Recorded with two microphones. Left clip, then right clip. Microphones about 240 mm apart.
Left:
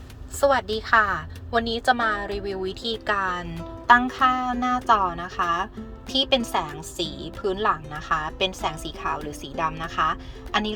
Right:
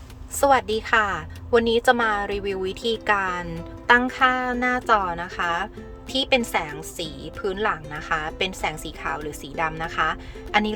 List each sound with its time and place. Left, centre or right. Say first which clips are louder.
0.3 s a woman's voice: right 2 dB; centre